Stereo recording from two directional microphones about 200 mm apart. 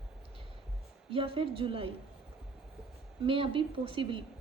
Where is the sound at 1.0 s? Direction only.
25° right (ahead or behind).